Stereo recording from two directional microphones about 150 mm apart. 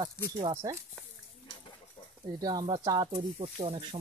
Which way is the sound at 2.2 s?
25° right (ahead or behind).